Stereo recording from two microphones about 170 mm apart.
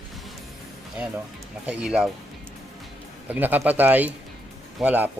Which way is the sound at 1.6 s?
5° right (ahead or behind).